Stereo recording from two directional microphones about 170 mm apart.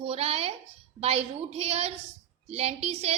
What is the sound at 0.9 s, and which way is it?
A woman's voice, 35° right (ahead or behind).